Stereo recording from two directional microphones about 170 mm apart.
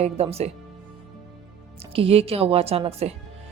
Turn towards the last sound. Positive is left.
turn(degrees=-35)  # may be behind; listen again after turning